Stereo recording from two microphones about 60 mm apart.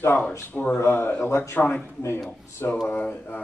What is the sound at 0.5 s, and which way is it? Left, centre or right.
Speech, left.